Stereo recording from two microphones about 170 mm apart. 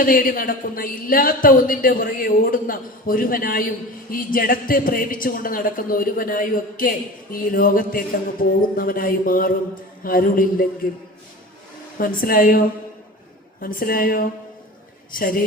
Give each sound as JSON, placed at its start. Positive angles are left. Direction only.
{"t": 0.0, "sound": "a woman's voice", "side_deg": 55}
{"t": 11.9, "sound": "a woman's voice", "side_deg": 55}